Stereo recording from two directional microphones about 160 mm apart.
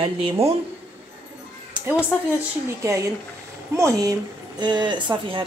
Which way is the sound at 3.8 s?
20° right (ahead or behind).